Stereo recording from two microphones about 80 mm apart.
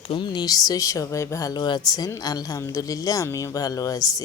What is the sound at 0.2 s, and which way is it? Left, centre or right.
Speech, left.